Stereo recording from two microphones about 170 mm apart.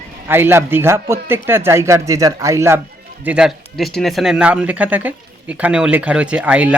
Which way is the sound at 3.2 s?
5° right (ahead or behind).